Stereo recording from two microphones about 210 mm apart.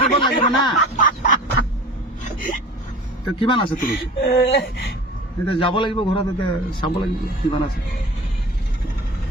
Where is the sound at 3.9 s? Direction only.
50° left (ahead or behind).